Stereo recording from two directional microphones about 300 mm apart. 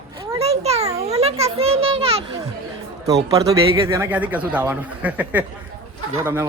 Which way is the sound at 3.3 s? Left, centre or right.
Centre.